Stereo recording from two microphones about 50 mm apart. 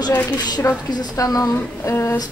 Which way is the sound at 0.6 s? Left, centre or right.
Left.